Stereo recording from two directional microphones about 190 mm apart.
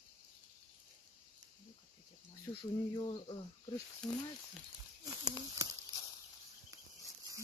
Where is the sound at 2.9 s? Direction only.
25° left (ahead or behind).